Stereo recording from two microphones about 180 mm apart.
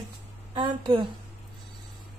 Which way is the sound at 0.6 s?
30° right (ahead or behind).